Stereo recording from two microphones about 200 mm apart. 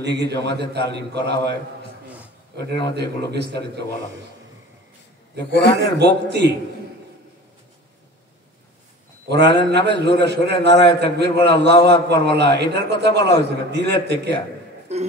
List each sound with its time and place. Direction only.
0.0 s a man's voice: 55° right (ahead or behind)
3.0 s a man's voice: 55° right (ahead or behind)
5.6 s a man's voice: 55° left (ahead or behind)
5.9 s a man's voice: 55° right (ahead or behind)
9.3 s a man's voice: 55° right (ahead or behind)
14.9 s speech: 35° right (ahead or behind)